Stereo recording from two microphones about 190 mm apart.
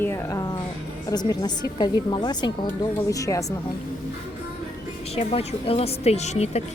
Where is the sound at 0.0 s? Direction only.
15° left (ahead or behind).